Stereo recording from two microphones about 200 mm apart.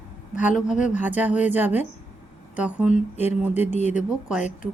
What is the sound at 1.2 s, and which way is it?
Speech, 5° right (ahead or behind).